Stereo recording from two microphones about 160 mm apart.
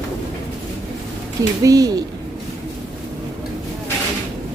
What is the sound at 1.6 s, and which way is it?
Speech, 20° right (ahead or behind).